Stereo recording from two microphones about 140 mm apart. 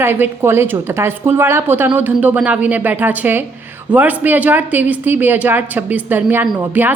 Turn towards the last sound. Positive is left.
turn(degrees=-15)  # may be behind; listen again after turning